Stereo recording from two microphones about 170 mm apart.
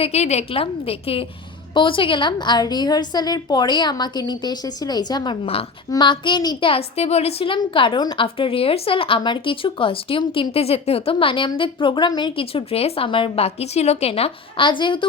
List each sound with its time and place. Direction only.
0.0 s a woman's voice: 40° left (ahead or behind)